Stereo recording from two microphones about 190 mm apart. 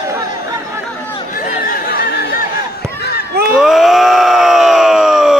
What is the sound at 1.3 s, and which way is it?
Chatter, 45° left (ahead or behind).